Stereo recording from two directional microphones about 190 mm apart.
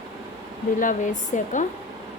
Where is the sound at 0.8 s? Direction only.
40° left (ahead or behind).